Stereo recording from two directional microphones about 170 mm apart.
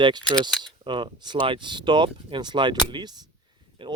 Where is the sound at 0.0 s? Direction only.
25° right (ahead or behind).